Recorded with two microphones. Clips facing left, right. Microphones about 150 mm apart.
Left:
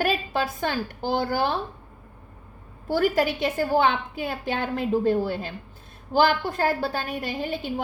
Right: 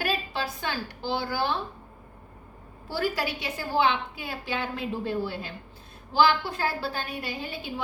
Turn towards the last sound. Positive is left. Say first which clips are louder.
# left 6 dB
turn(degrees=50)  # may be behind; listen again after turning